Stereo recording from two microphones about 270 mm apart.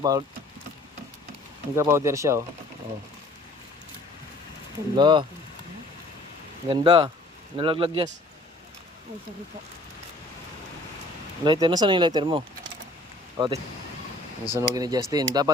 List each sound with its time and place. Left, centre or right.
0.0 s speech: centre
1.7 s speech: centre
4.9 s speech: centre
6.7 s speech: centre
11.4 s speech: centre